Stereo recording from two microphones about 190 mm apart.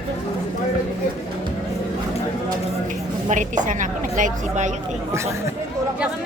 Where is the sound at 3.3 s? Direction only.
40° right (ahead or behind).